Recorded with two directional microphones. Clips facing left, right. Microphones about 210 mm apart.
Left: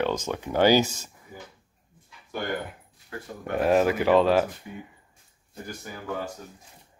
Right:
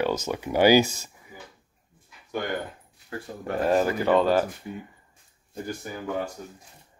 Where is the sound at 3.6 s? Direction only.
Centre (ahead or behind).